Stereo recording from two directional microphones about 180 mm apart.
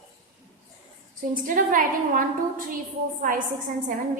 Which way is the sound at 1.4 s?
50° right (ahead or behind).